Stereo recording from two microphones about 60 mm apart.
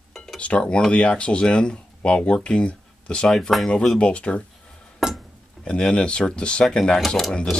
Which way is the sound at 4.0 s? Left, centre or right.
Centre.